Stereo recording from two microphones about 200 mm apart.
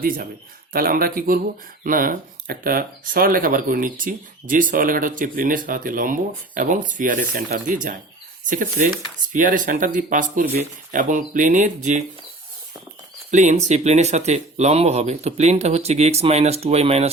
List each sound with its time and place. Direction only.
0.7 s speech: 45° right (ahead or behind)
13.3 s speech: 35° right (ahead or behind)